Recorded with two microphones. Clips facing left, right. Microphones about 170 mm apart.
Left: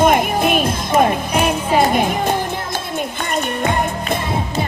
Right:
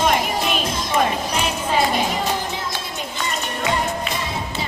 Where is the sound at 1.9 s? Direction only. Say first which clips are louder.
Left 5 dB; 55° left (ahead or behind).